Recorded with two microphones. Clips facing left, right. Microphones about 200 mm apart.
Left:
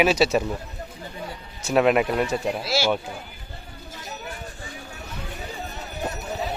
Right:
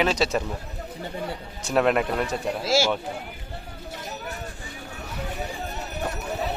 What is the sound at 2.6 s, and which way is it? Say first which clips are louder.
Speech: right 3 dB; 45° right (ahead or behind).